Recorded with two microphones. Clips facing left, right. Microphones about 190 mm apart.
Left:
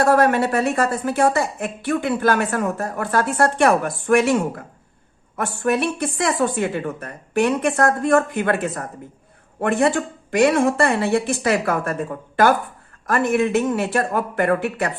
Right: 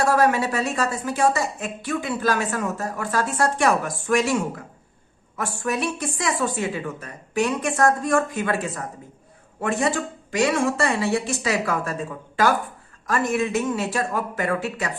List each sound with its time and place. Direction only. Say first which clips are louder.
0.0 s a woman's voice: left 3 dB; 55° left (ahead or behind)